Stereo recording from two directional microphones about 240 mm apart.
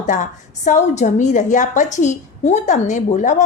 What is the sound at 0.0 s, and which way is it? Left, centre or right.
A woman's voice, left.